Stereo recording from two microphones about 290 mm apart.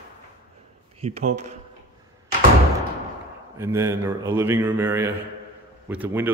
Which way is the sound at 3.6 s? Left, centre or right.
Centre.